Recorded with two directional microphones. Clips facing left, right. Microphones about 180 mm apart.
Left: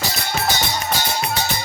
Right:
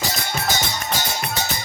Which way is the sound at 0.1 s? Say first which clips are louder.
Left 2 dB; 45° right (ahead or behind).